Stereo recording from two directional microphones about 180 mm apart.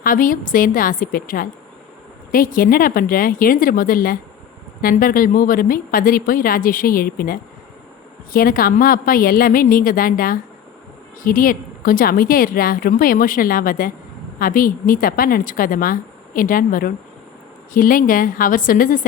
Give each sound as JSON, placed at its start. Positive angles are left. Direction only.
{"t": 0.0, "sound": "a woman's voice", "side_deg": 50}